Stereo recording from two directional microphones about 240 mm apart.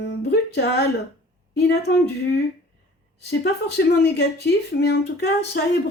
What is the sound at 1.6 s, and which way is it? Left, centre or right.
Speech, left.